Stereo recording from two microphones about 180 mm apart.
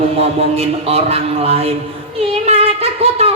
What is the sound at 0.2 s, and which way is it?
Mantra, 35° right (ahead or behind).